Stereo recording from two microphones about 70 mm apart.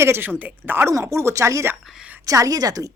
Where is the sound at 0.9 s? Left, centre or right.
Right.